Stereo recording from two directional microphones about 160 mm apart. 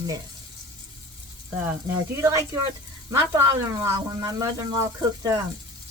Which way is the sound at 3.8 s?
20° right (ahead or behind).